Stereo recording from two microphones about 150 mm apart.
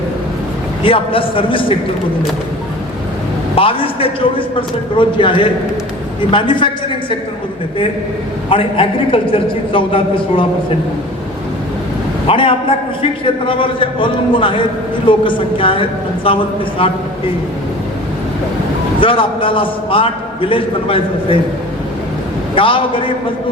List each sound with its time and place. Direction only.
0.8 s a man's voice: 35° left (ahead or behind)
3.5 s a man's voice: 35° left (ahead or behind)
8.4 s a man's voice: 35° left (ahead or behind)
12.3 s a man's voice: 35° left (ahead or behind)
18.9 s a man's voice: 35° left (ahead or behind)
22.5 s a man's voice: 35° left (ahead or behind)